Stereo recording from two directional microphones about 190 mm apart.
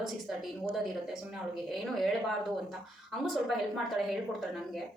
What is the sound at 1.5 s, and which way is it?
A woman's voice, centre (ahead or behind).